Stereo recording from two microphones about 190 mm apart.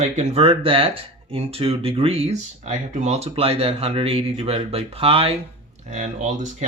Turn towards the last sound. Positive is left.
turn(degrees=-40)  # may be behind; listen again after turning